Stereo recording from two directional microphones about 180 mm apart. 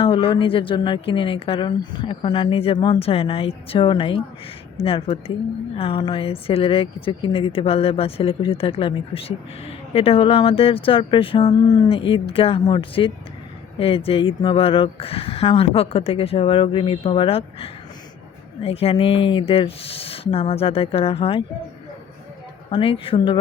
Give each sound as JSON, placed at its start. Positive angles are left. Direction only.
{"t": 0.0, "sound": "a woman's voice", "side_deg": 30}
{"t": 22.7, "sound": "a woman's voice", "side_deg": 30}